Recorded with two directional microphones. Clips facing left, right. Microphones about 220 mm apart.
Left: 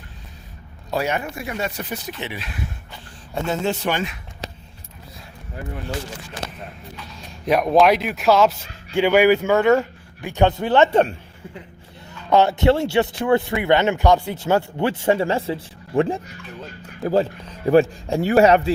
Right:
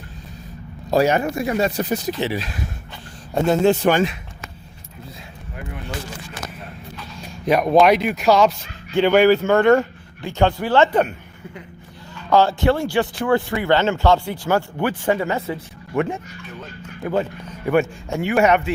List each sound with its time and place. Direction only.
0.9 s a man's voice: 40° right (ahead or behind)
6.9 s a man's voice: centre (ahead or behind)
10.2 s a man's voice: 15° left (ahead or behind)
12.3 s a man's voice: 20° left (ahead or behind)